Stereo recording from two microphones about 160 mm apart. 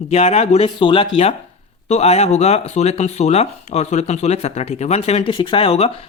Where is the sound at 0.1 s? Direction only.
40° left (ahead or behind).